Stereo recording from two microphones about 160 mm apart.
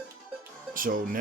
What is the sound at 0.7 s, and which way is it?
Speech, 60° right (ahead or behind).